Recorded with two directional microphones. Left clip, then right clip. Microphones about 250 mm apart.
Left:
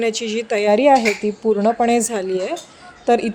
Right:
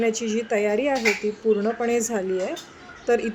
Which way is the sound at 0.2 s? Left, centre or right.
Left.